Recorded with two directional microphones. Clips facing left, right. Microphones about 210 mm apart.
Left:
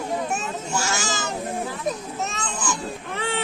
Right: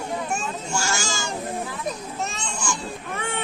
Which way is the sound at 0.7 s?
Centre (ahead or behind).